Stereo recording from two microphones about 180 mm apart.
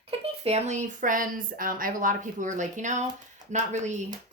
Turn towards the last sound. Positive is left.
turn(degrees=-40)  # may be behind; listen again after turning